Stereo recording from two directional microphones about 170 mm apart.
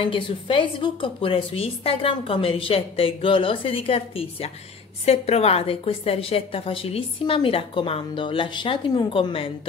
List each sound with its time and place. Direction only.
0.0 s a woman's voice: 30° left (ahead or behind)